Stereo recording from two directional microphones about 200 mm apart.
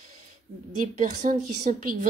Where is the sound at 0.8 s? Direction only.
40° right (ahead or behind).